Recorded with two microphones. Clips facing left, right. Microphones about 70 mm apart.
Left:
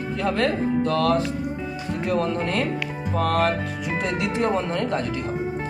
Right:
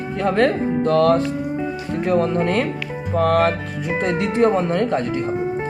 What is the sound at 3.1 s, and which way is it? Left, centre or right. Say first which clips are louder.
Music: right 5 dB; right.